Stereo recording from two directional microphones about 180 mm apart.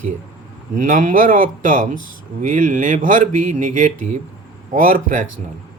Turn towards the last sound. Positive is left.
turn(degrees=-45)  # may be behind; listen again after turning